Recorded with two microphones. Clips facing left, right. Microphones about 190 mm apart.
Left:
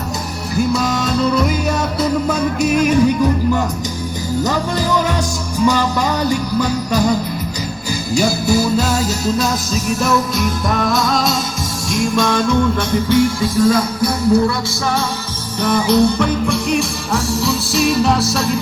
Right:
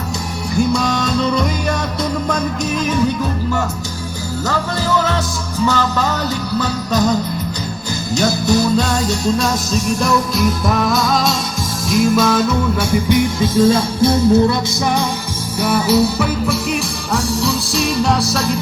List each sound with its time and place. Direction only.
0.5 s music: 5° left (ahead or behind)
4.4 s music: 15° left (ahead or behind); by 13.0 s 5° right (ahead or behind)
13.1 s music: 15° right (ahead or behind)
15.6 s music: 5° right (ahead or behind)